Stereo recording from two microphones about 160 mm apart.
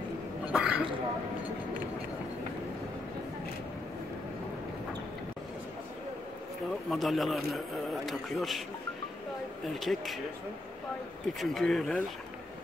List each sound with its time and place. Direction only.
0.5 s a sound: 5° right (ahead or behind)
6.9 s a man's voice: centre (ahead or behind)
9.8 s a man's voice: centre (ahead or behind)
11.3 s a man's voice: centre (ahead or behind)